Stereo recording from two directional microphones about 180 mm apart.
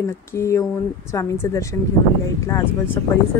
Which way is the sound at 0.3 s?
15° left (ahead or behind).